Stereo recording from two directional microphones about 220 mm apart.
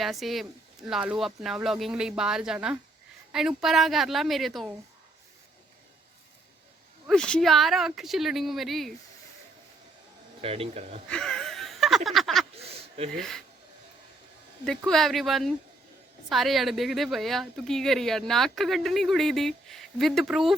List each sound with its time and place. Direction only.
0.0 s speech: centre (ahead or behind)
7.1 s speech: 5° left (ahead or behind)
10.4 s speech: 25° right (ahead or behind)
11.1 s a sound: 5° left (ahead or behind)
12.5 s a sound: 25° right (ahead or behind)
13.1 s speech: centre (ahead or behind)
14.8 s speech: centre (ahead or behind)